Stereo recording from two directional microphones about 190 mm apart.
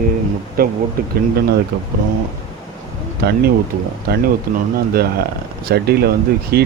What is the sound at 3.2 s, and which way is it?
Speech, 55° right (ahead or behind).